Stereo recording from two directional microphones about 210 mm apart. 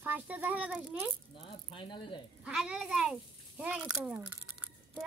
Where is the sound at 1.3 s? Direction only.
25° left (ahead or behind).